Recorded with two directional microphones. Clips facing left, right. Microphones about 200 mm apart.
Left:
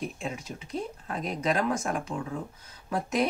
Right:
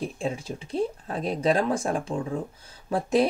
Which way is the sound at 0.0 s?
30° right (ahead or behind).